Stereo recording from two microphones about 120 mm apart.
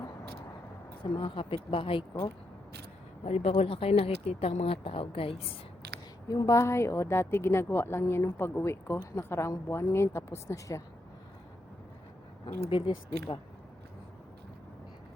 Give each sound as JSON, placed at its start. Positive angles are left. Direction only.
{"t": 1.1, "sound": "speech", "side_deg": 45}
{"t": 3.2, "sound": "speech", "side_deg": 60}
{"t": 6.2, "sound": "a woman's voice", "side_deg": 30}
{"t": 12.5, "sound": "speech", "side_deg": 60}
{"t": 12.8, "sound": "speech", "side_deg": 40}